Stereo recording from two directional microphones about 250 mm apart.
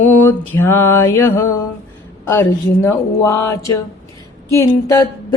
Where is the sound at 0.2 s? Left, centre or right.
Centre.